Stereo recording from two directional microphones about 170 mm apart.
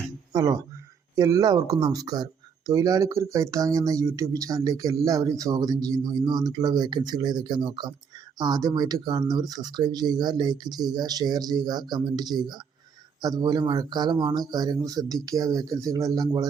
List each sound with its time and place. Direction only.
0.3 s speech: 20° right (ahead or behind)